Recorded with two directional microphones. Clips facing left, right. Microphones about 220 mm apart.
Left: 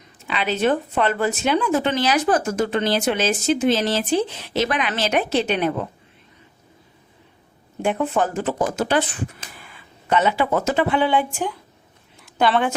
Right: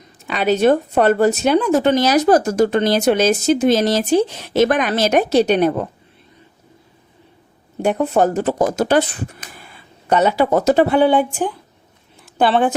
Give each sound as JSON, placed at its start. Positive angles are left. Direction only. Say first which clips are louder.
{"t": 0.3, "sound": "speech", "louder": "right 6 dB", "side_deg": -45}
{"t": 7.8, "sound": "speech", "louder": "right 5 dB", "side_deg": -40}